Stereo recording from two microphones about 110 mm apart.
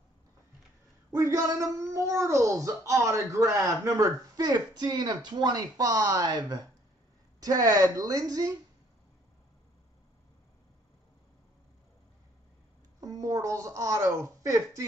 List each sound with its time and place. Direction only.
1.1 s a child's voice: 30° right (ahead or behind)
13.0 s a woman's voice: 30° right (ahead or behind)